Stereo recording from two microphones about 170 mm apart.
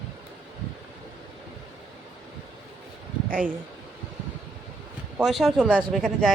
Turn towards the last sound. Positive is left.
turn(degrees=0)  # may be behind; listen again after turning